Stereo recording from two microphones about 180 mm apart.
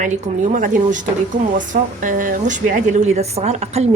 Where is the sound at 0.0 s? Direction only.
45° right (ahead or behind).